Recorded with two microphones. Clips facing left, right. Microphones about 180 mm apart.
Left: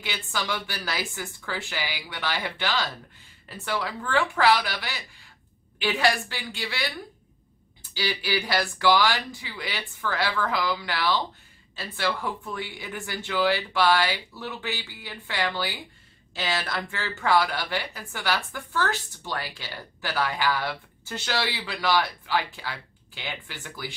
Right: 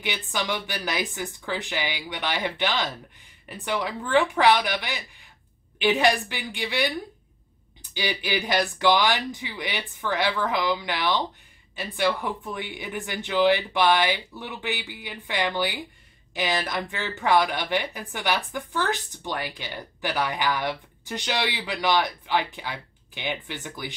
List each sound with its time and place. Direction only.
0.0 s speech: 20° right (ahead or behind)
7.9 s speech: 20° right (ahead or behind)